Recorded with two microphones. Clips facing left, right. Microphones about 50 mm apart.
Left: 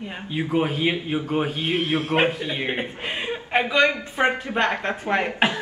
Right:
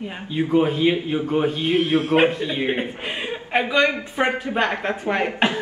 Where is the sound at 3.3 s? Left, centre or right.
Centre.